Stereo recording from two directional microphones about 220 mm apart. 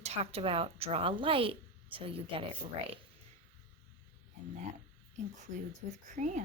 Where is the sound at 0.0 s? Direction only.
30° right (ahead or behind).